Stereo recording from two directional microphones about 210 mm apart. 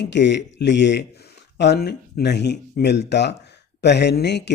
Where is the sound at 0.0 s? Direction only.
55° left (ahead or behind).